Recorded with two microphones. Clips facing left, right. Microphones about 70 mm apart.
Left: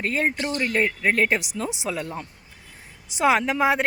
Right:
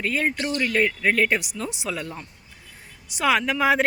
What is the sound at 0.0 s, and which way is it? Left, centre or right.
Speech, left.